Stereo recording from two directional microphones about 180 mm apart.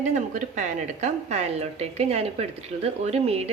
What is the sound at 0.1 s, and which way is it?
A woman's voice, 40° right (ahead or behind).